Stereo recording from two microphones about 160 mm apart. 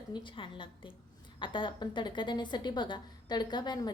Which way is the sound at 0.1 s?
30° left (ahead or behind).